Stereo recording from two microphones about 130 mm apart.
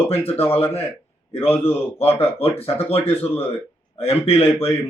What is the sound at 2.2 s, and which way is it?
Speech, 50° left (ahead or behind).